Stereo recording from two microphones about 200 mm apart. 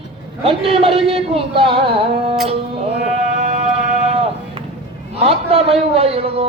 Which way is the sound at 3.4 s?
35° right (ahead or behind).